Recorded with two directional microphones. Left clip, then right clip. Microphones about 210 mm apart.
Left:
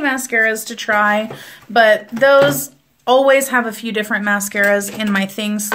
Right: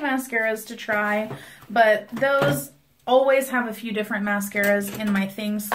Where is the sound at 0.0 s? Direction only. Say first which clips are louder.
Left 8 dB; 50° left (ahead or behind).